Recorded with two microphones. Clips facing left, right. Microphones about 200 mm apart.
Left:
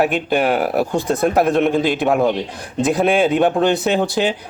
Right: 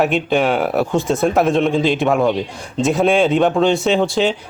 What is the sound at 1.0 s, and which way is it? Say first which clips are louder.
Speech: left 1 dB; centre (ahead or behind).